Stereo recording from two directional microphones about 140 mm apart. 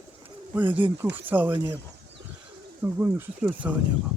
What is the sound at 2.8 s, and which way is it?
Speech, 15° right (ahead or behind).